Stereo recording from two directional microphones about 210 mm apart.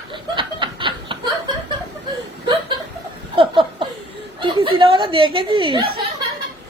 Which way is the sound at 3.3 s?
25° right (ahead or behind).